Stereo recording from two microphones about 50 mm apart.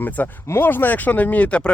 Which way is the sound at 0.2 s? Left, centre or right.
Left.